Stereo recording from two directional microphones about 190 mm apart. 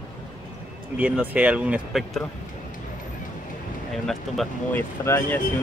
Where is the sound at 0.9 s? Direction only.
10° right (ahead or behind).